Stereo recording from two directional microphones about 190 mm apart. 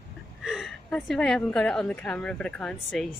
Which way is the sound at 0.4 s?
Centre (ahead or behind).